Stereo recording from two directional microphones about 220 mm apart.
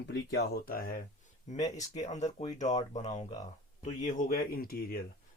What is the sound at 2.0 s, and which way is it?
Speech, 30° left (ahead or behind).